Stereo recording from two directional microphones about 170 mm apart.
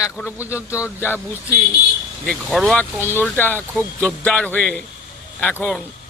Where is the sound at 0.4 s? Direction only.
15° left (ahead or behind).